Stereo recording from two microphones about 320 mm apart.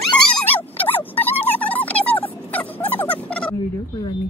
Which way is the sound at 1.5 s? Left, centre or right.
Centre.